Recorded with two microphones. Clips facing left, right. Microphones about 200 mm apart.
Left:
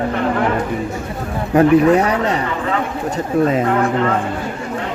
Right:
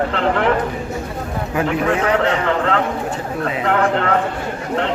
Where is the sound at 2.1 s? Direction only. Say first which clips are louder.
Right 2 dB; 65° right (ahead or behind).